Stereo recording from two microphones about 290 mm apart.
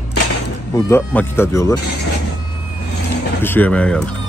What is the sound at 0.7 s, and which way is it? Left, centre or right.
Speech, centre.